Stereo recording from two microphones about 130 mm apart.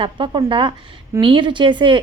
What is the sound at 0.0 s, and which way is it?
Speech, 40° right (ahead or behind).